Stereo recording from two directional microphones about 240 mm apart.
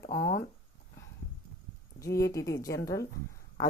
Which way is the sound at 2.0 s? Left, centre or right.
Centre.